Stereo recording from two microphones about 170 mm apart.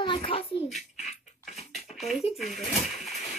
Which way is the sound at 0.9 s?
40° left (ahead or behind).